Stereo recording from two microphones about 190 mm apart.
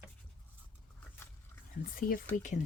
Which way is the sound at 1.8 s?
50° left (ahead or behind).